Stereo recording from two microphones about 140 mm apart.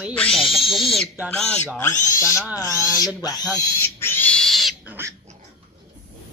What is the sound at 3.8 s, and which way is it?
Pig, 15° left (ahead or behind).